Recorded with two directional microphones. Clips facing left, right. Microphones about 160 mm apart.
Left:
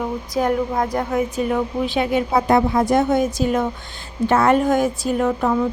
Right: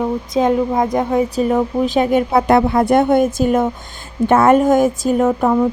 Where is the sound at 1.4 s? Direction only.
40° right (ahead or behind).